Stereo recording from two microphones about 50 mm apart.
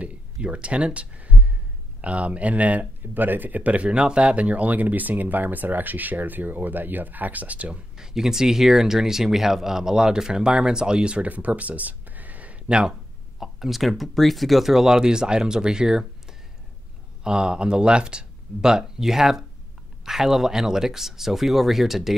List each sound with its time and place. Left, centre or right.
0.0 s a sound: right
2.0 s speech: right
8.0 s speech: centre; by 12.5 s right
12.6 s speech: centre
13.4 s speech: centre